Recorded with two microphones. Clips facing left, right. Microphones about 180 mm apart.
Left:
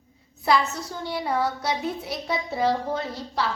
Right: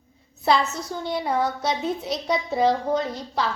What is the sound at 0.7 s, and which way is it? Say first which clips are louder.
A woman's voice: right 3 dB; 20° right (ahead or behind).